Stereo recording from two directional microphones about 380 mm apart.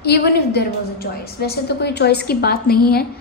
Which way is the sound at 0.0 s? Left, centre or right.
Left.